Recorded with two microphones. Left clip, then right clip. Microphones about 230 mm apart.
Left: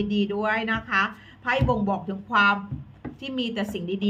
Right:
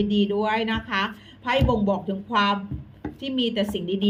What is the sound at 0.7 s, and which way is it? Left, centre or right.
Speech, centre.